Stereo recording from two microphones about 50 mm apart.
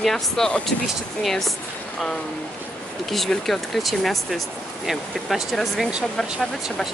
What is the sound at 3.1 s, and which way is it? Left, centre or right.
Speech, centre.